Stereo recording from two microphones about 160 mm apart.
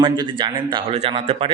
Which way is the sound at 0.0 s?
30° right (ahead or behind).